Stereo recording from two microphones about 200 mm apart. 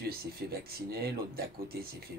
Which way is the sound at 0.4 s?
55° right (ahead or behind).